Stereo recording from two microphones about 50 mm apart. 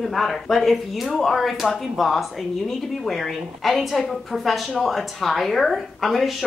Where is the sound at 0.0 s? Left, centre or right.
Centre.